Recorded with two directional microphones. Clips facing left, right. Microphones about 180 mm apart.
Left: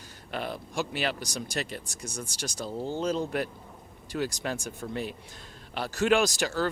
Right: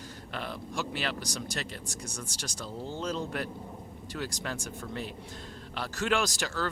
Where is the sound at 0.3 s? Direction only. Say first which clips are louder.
Left 5 dB; 10° left (ahead or behind).